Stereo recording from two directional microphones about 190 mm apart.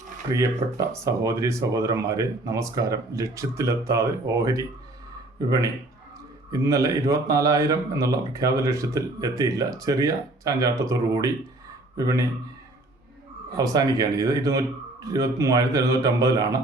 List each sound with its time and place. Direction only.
0.3 s speech: 15° right (ahead or behind)
13.6 s speech: 20° right (ahead or behind)